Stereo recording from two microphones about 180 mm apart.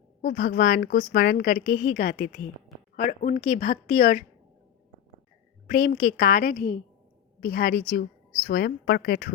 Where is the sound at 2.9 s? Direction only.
45° left (ahead or behind).